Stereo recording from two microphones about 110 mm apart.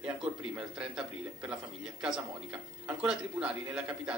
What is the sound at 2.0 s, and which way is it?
A man's voice, 10° right (ahead or behind).